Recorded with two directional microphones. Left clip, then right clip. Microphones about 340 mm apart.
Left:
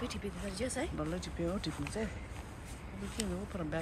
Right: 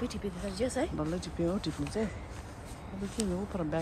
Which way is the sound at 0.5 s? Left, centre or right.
Right.